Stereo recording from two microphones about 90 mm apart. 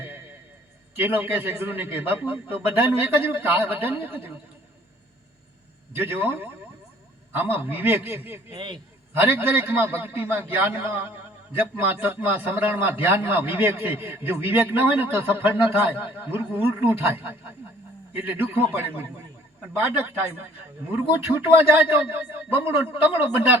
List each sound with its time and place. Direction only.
1.0 s a man's voice: 20° right (ahead or behind)
6.0 s a man's voice: 25° right (ahead or behind)
8.5 s a man's voice: 60° right (ahead or behind)
9.1 s a man's voice: 25° right (ahead or behind)
19.8 s a man's voice: 25° right (ahead or behind)